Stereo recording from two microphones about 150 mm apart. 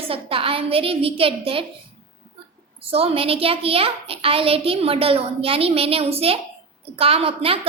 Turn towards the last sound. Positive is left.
turn(degrees=-40)  # may be behind; listen again after turning